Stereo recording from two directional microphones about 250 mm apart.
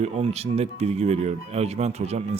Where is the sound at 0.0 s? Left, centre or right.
Right.